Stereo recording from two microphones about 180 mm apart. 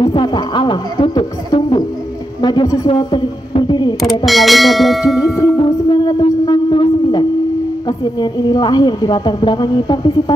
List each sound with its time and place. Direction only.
0.0 s a sound: 25° left (ahead or behind)
2.4 s speech: 25° left (ahead or behind)
3.0 s a sound: 25° left (ahead or behind)
4.3 s bell: centre (ahead or behind)
5.2 s music: 20° left (ahead or behind)
8.2 s speech: 25° left (ahead or behind)